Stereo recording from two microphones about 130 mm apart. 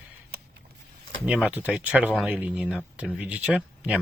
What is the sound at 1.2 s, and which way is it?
Speech, 10° right (ahead or behind).